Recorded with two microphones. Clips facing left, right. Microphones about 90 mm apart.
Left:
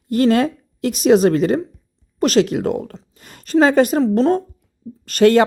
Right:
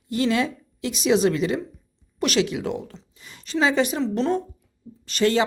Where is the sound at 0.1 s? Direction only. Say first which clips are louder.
Left 7 dB; 50° left (ahead or behind).